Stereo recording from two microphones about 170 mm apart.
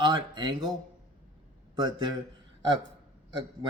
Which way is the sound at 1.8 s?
25° right (ahead or behind).